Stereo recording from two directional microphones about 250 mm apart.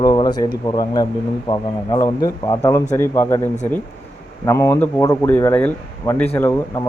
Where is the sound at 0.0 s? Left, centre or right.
Centre.